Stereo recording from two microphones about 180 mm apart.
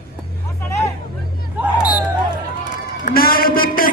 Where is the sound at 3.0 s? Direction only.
55° left (ahead or behind).